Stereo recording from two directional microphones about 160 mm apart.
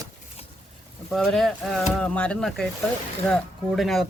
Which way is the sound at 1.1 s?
Centre (ahead or behind).